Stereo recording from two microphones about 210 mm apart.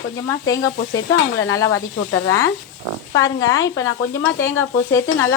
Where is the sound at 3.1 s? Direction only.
15° left (ahead or behind).